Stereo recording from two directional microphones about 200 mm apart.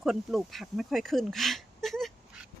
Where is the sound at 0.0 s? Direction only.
Centre (ahead or behind).